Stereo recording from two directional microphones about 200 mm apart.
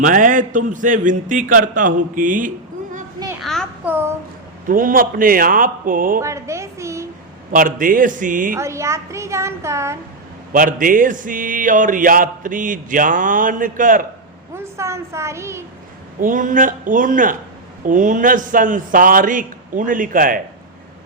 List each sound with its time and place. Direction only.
0.0 s mantra: 40° right (ahead or behind)
3.4 s a sound: centre (ahead or behind)
3.8 s a woman's voice: 10° right (ahead or behind)
4.6 s a man's voice: 45° right (ahead or behind)
6.1 s a woman's voice: 15° right (ahead or behind)
7.5 s a man's voice: 45° right (ahead or behind)
8.5 s a woman's voice: 15° right (ahead or behind)
10.5 s mantra: 40° right (ahead or behind)
14.5 s a woman's voice: 15° right (ahead or behind)
16.2 s mantra: 40° right (ahead or behind)
17.8 s a man's voice: 40° right (ahead or behind)